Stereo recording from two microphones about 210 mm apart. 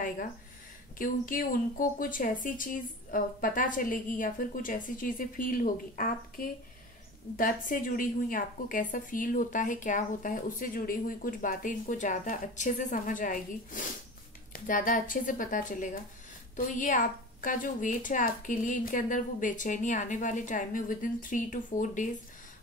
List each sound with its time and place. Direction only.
0.9 s a woman's voice: 40° left (ahead or behind)